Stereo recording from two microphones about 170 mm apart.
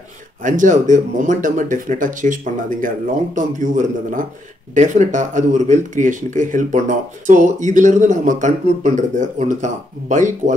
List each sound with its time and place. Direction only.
0.4 s speech: 50° right (ahead or behind)